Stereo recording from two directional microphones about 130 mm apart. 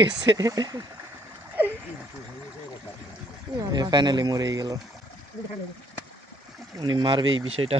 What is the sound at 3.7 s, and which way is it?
Speech, 35° right (ahead or behind).